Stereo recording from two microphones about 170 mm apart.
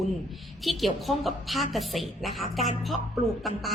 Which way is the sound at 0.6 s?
Centre (ahead or behind).